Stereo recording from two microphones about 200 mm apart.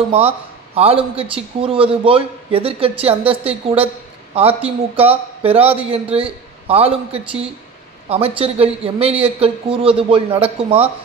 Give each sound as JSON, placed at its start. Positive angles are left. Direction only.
{"t": 0.7, "sound": "a man's voice", "side_deg": -30}